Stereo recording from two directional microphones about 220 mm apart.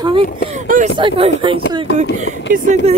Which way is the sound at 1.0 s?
25° right (ahead or behind).